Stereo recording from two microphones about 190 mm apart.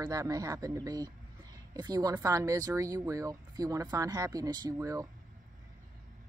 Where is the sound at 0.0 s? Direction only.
20° right (ahead or behind).